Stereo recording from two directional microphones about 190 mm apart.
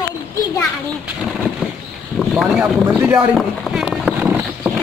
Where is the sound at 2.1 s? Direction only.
Centre (ahead or behind).